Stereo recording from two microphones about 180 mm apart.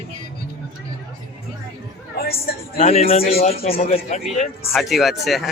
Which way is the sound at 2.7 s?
35° left (ahead or behind).